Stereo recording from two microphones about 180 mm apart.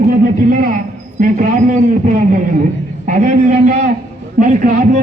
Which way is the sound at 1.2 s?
45° right (ahead or behind).